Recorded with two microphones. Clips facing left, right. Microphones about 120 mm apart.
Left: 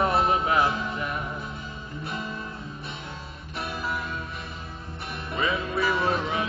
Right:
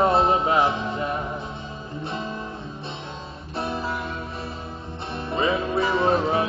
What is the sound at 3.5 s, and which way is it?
Guitar, 30° right (ahead or behind).